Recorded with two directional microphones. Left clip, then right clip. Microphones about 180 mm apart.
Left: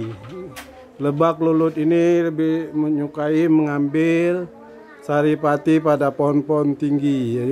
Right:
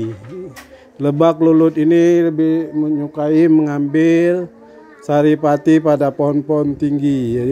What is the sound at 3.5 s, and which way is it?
Speech, 15° right (ahead or behind).